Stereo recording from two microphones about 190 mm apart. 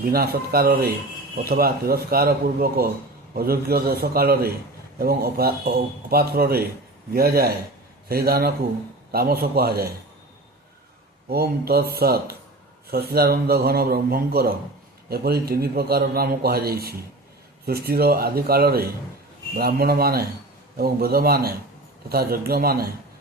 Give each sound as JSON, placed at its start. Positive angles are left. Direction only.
{"t": 0.0, "sound": "a man's voice", "side_deg": -50}
{"t": 11.3, "sound": "a man's voice", "side_deg": -55}